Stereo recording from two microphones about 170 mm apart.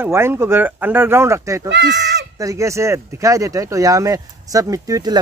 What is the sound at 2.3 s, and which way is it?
Speech, 20° right (ahead or behind).